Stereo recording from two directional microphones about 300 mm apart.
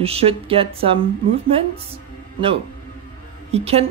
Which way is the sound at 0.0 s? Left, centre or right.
Centre.